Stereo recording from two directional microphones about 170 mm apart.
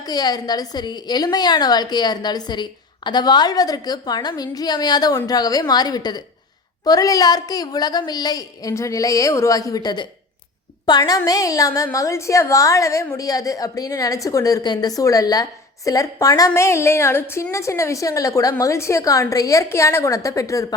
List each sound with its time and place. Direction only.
0.1 s a woman's voice: 25° left (ahead or behind)